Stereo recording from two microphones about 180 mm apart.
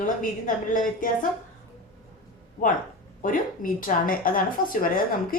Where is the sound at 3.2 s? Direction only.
50° left (ahead or behind).